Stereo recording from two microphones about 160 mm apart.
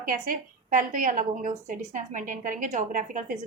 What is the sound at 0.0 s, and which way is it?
A woman's voice, 60° right (ahead or behind).